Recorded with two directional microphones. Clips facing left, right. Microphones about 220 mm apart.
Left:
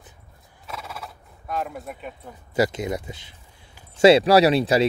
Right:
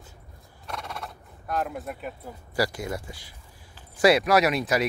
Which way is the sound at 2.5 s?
20° left (ahead or behind).